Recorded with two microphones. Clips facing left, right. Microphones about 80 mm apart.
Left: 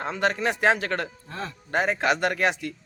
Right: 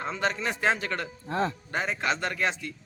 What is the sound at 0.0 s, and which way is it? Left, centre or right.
Speech, left.